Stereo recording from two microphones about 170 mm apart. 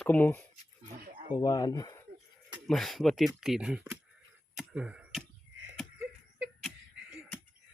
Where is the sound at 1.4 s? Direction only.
20° left (ahead or behind).